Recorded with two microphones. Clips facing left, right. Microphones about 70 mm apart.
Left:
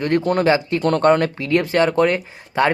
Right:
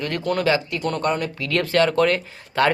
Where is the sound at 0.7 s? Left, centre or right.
Left.